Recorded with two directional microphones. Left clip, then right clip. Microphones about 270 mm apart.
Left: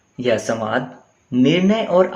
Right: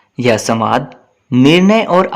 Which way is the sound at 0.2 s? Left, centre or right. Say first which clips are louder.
Right 6 dB; right.